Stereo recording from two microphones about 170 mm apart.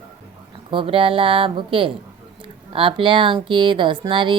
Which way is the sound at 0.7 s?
30° right (ahead or behind).